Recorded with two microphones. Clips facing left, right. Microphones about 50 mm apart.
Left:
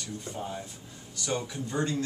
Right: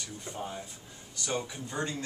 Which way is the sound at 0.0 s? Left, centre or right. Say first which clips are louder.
Left 2 dB; centre.